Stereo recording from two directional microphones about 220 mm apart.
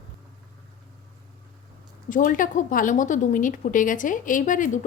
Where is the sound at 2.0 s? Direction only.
35° left (ahead or behind).